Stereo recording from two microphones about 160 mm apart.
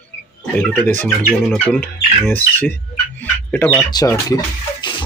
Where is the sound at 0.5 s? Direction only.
10° left (ahead or behind).